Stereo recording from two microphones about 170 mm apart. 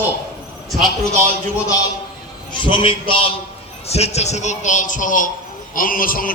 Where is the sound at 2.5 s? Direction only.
30° left (ahead or behind).